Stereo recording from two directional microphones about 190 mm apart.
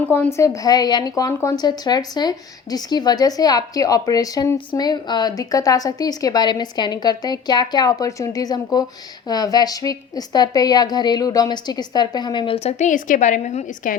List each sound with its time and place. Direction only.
0.1 s speech: 15° left (ahead or behind); by 13.9 s 40° left (ahead or behind)